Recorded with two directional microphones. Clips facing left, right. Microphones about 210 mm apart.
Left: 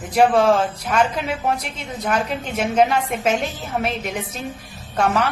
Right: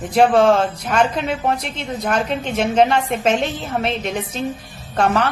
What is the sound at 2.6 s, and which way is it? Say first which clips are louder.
A woman's voice: right 2 dB; 5° left (ahead or behind).